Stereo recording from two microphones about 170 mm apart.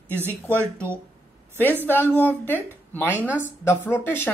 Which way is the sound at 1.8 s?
10° left (ahead or behind).